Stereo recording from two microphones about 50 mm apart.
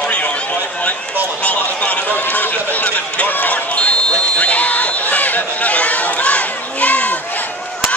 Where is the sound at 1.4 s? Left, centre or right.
Left.